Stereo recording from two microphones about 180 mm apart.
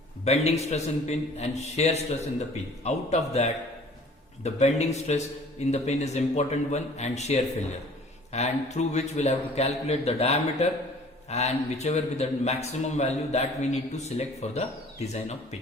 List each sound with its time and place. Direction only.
0.3 s a man's voice: 35° left (ahead or behind)